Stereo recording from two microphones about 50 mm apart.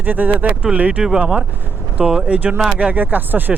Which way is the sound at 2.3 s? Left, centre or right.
Right.